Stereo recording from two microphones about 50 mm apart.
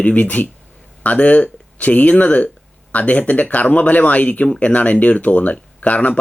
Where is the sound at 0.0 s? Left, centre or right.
Left.